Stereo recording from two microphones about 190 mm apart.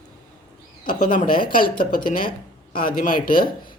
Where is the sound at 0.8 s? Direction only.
45° left (ahead or behind).